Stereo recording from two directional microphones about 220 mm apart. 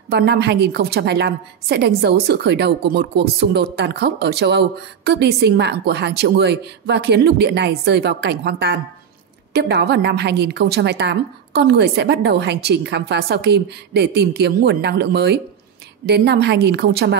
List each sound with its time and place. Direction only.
0.1 s a woman's voice: 50° right (ahead or behind)